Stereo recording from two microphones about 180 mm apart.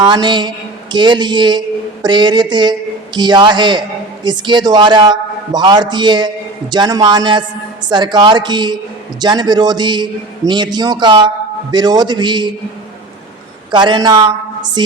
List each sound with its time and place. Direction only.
0.0 s a man's voice: 25° right (ahead or behind)
13.7 s a man's voice: 25° right (ahead or behind)